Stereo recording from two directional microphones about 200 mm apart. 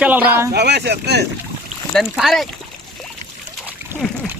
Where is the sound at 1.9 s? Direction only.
Centre (ahead or behind).